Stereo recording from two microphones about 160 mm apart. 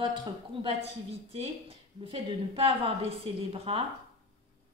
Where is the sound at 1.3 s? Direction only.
35° right (ahead or behind).